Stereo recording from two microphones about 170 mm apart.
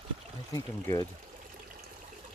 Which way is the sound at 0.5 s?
20° left (ahead or behind).